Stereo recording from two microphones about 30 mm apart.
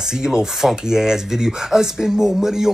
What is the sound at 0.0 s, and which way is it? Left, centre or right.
Speech, centre.